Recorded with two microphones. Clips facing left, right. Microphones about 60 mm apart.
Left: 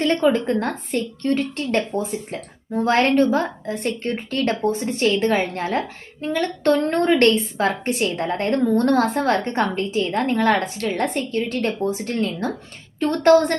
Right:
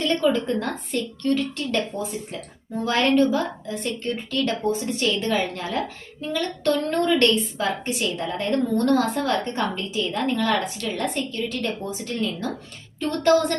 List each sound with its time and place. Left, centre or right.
0.0 s a woman's voice: left